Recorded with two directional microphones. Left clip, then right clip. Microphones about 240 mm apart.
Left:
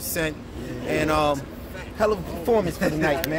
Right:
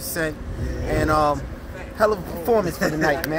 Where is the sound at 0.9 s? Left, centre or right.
Centre.